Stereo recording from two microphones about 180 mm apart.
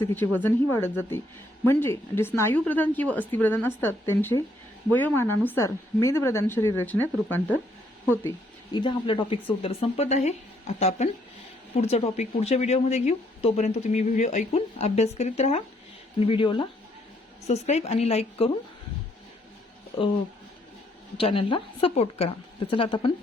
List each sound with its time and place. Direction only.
0.3 s a woman's voice: 10° left (ahead or behind)
8.7 s speech: 25° left (ahead or behind)
21.2 s speech: 30° left (ahead or behind)